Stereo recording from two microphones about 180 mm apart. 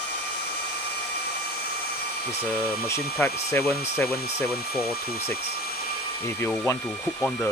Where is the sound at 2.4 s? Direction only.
15° left (ahead or behind).